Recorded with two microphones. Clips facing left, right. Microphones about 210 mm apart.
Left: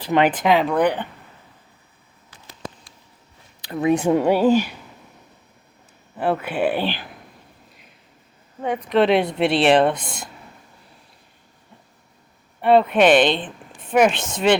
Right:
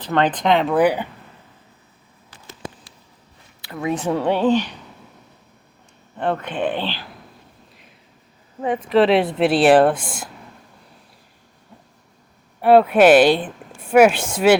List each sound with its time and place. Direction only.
0.0 s speech: 10° left (ahead or behind); by 1.0 s 10° right (ahead or behind)
3.6 s speech: 20° left (ahead or behind)
6.1 s speech: 5° left (ahead or behind)
8.6 s speech: centre (ahead or behind)
12.6 s a woman's voice: 5° right (ahead or behind)